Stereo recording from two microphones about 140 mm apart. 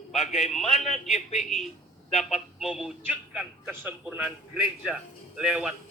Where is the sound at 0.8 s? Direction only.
50° left (ahead or behind).